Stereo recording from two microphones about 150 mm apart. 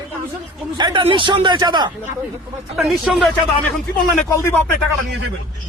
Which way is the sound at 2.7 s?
Centre (ahead or behind).